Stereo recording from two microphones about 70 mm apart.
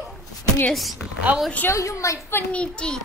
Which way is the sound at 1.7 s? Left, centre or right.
Left.